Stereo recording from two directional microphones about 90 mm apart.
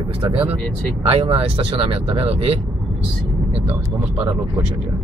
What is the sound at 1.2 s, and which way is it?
Speech, 85° right.